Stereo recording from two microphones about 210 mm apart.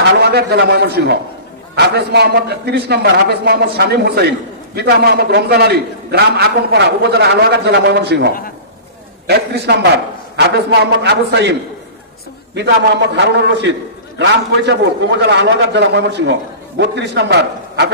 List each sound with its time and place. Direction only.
0.3 s a man's voice: 50° right (ahead or behind)
9.3 s a man's voice: 50° right (ahead or behind)
13.1 s a man's voice: 55° right (ahead or behind)